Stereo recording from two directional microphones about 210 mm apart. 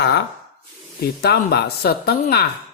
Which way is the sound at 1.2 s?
50° left (ahead or behind).